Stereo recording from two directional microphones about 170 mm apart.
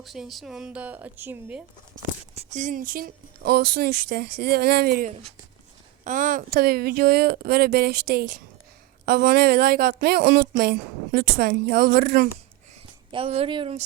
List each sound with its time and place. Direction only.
0.0 s a woman's voice: centre (ahead or behind)
2.3 s speech: 45° right (ahead or behind); by 5.0 s 65° right (ahead or behind)
6.1 s speech: 50° right (ahead or behind); by 12.3 s 70° right (ahead or behind)
13.1 s speech: 35° right (ahead or behind)